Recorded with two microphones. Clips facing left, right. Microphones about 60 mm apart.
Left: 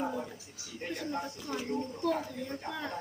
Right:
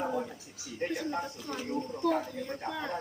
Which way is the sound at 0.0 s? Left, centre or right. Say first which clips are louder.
Right 2 dB; centre.